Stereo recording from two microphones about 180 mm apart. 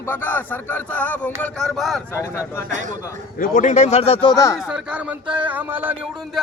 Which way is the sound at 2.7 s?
45° right (ahead or behind).